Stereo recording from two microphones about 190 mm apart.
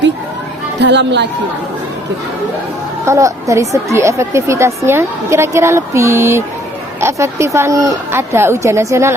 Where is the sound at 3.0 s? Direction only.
15° right (ahead or behind).